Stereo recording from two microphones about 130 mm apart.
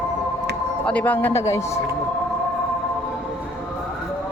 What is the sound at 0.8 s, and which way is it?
Speech, 10° left (ahead or behind).